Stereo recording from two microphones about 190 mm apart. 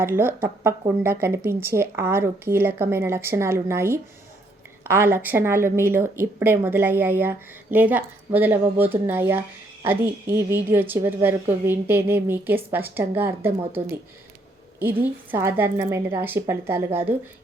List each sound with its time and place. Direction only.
0.0 s speech: 10° right (ahead or behind)
15.0 s speech: 10° right (ahead or behind)